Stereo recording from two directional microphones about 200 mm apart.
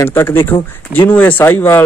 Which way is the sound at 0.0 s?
10° left (ahead or behind).